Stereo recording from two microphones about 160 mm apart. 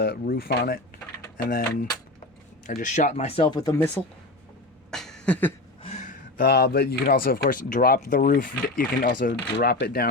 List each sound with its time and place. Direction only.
0.0 s speech: 75° left (ahead or behind)
1.4 s speech: 60° left (ahead or behind)
2.6 s speech: 50° left (ahead or behind)
3.5 s speech: 25° left (ahead or behind)
3.8 s speech: 10° left (ahead or behind)
4.9 s a sound: 5° left (ahead or behind)
5.8 s speech: 45° left (ahead or behind); by 10.1 s 70° left (ahead or behind)